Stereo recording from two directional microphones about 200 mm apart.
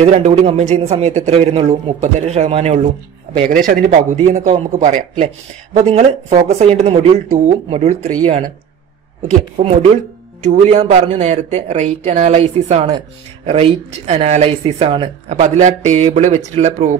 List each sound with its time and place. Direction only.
0.0 s speech: 35° right (ahead or behind)
9.6 s speech: 25° right (ahead or behind)